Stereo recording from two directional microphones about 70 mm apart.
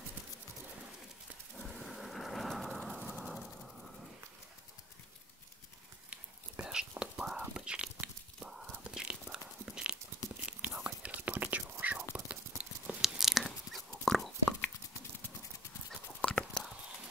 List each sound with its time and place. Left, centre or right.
1.6 s a sound: centre
3.1 s vehicle: centre
6.0 s whispering: centre
8.9 s a sound: centre
10.4 s whispering: centre
12.3 s clip-clop: centre
13.0 s biting: centre
15.9 s whispering: centre